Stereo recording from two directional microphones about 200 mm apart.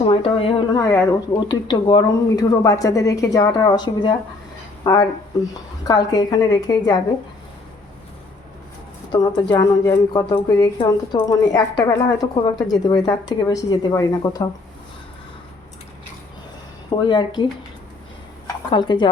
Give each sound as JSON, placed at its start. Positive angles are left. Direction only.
{"t": 0.0, "sound": "a woman's voice", "side_deg": 30}
{"t": 9.1, "sound": "a woman's voice", "side_deg": 20}
{"t": 17.0, "sound": "a woman's voice", "side_deg": 20}
{"t": 18.4, "sound": "speech", "side_deg": 25}